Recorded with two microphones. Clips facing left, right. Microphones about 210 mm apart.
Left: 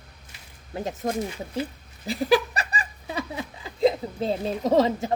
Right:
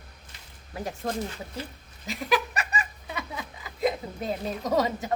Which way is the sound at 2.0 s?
30° left (ahead or behind).